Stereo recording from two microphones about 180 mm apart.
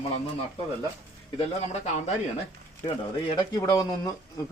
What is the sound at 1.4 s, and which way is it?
Speech, 35° left (ahead or behind).